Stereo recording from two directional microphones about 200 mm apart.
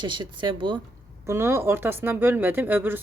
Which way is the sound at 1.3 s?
10° right (ahead or behind).